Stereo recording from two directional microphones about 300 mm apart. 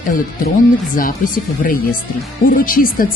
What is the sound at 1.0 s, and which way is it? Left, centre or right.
A woman's voice, left.